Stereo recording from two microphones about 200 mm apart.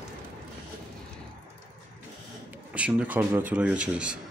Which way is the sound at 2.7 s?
5° right (ahead or behind).